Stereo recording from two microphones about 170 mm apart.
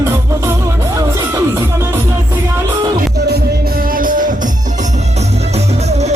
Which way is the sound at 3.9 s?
55° right (ahead or behind).